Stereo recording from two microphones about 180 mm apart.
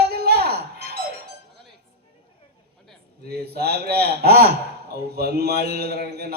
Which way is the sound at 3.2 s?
60° right (ahead or behind).